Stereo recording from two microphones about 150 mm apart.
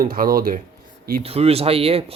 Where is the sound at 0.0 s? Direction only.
75° right (ahead or behind).